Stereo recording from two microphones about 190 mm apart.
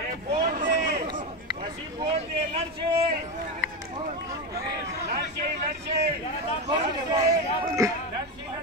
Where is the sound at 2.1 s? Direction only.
30° right (ahead or behind).